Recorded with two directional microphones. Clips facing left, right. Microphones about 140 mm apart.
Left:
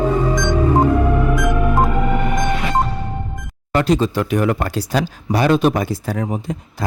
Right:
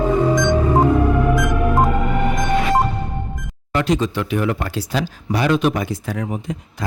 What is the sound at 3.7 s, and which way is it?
Speech, 35° left (ahead or behind).